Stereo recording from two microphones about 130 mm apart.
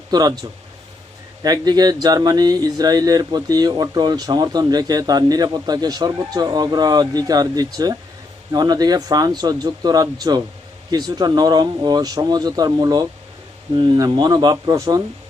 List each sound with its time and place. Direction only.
0.1 s speech: 30° right (ahead or behind)
1.4 s speech: 30° right (ahead or behind)